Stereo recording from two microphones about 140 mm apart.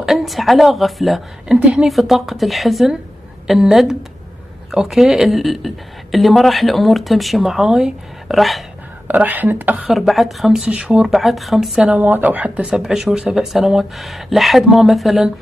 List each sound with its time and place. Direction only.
0.0 s speech: centre (ahead or behind)
9.0 s speech: 10° right (ahead or behind)
9.8 s speech: centre (ahead or behind)